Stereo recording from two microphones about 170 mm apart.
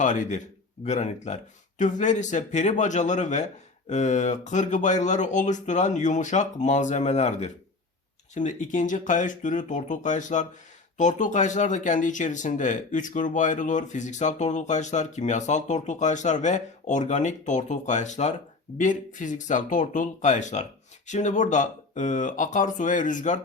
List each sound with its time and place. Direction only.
0.0 s speech: 45° left (ahead or behind)